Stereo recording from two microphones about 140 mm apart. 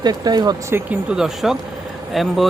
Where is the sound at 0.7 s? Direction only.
5° right (ahead or behind).